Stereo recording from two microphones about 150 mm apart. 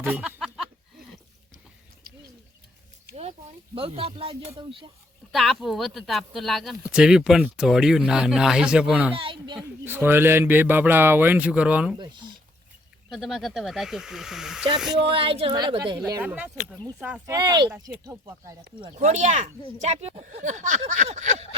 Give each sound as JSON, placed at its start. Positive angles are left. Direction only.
{"t": 0.0, "sound": "a sound", "side_deg": -10}
{"t": 3.8, "sound": "speech", "side_deg": -40}
{"t": 5.3, "sound": "speech", "side_deg": 0}
{"t": 9.1, "sound": "a sound", "side_deg": -35}
{"t": 9.8, "sound": "a man's voice", "side_deg": -15}
{"t": 11.9, "sound": "speech", "side_deg": -30}
{"t": 13.1, "sound": "speech", "side_deg": 0}
{"t": 15.0, "sound": "speech", "side_deg": -35}
{"t": 16.2, "sound": "a man's voice", "side_deg": -10}
{"t": 17.2, "sound": "speech", "side_deg": -25}
{"t": 18.9, "sound": "speech", "side_deg": -50}